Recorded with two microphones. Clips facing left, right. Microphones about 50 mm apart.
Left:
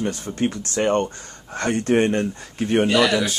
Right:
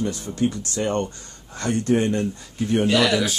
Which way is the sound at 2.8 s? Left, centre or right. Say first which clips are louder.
Even; centre.